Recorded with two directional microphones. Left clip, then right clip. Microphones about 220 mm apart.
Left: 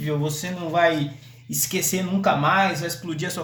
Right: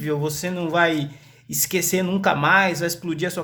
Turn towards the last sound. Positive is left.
turn(degrees=-25)  # may be behind; listen again after turning